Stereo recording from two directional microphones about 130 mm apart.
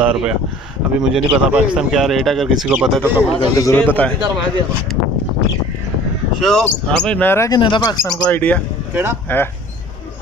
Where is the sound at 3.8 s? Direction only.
10° left (ahead or behind).